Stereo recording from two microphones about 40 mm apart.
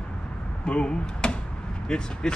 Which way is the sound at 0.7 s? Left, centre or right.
Left.